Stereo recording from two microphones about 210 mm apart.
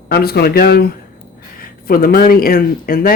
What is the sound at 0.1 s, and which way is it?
Speech, 50° left (ahead or behind).